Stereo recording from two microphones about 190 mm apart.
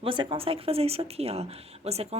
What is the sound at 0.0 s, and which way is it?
A woman's voice, 25° right (ahead or behind).